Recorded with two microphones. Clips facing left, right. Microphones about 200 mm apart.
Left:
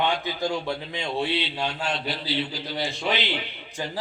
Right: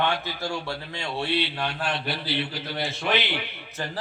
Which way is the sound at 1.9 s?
60° right (ahead or behind).